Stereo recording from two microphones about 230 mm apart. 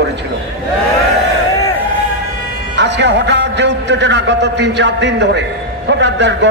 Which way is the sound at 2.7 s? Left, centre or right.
Right.